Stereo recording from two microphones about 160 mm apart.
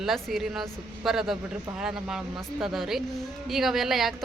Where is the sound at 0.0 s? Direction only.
Centre (ahead or behind).